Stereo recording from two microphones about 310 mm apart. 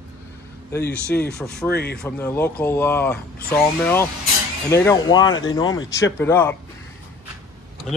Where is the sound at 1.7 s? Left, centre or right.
Left.